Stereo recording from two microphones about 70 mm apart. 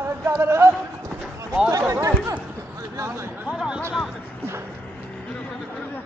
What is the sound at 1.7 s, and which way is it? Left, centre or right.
Speech, right.